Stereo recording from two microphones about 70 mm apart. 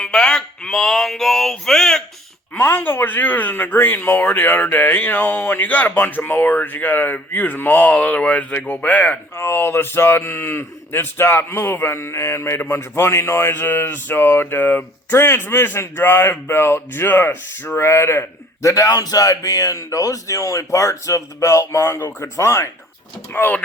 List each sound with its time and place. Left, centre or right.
0.0 s a sound: centre
2.6 s speech: left
9.3 s speech: left
13.5 s speech: left
18.6 s speech: left
23.3 s speech: left